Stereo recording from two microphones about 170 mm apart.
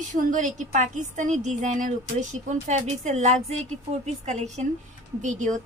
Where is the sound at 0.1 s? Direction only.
45° right (ahead or behind).